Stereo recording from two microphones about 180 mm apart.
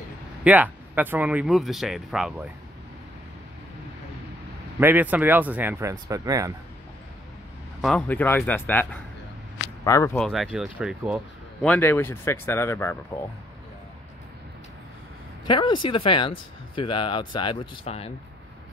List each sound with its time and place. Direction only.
0.4 s speech: 10° right (ahead or behind)
4.7 s speech: 10° right (ahead or behind)
7.8 s speech: 5° left (ahead or behind)
10.1 s speech: centre (ahead or behind)
11.6 s speech: 10° left (ahead or behind)
15.4 s speech: 25° left (ahead or behind)